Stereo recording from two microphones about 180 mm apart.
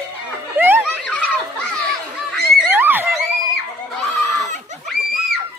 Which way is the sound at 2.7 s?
10° right (ahead or behind).